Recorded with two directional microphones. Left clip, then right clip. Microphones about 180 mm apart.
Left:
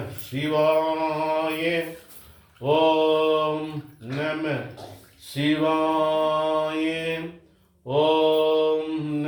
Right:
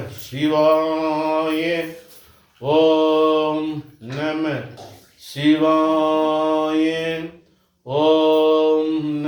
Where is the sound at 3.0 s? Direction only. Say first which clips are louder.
Right 4 dB; 35° right (ahead or behind).